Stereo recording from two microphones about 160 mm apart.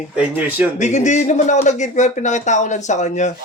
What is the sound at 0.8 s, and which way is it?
Speech, 45° left (ahead or behind).